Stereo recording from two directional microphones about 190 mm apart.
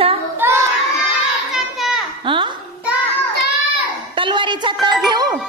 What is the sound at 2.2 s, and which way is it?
Speech, 25° right (ahead or behind).